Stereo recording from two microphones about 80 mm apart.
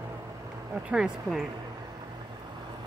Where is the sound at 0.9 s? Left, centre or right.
Centre.